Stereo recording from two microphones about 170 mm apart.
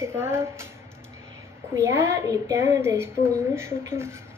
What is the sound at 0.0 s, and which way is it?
Speech, 15° right (ahead or behind).